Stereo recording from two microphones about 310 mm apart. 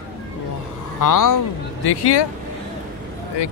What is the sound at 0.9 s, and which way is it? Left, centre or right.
Speech, left.